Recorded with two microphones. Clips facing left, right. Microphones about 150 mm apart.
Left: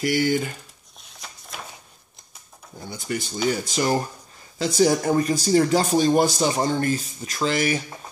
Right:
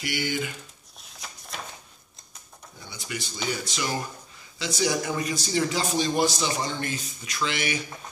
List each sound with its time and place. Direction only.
0.0 s speech: 40° left (ahead or behind)
1.0 s a sound: centre (ahead or behind)
2.8 s speech: 45° left (ahead or behind)